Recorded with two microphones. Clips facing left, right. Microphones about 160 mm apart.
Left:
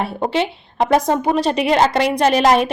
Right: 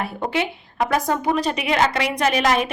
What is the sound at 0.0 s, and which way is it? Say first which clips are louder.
A woman's voice: left 4 dB; 25° left (ahead or behind).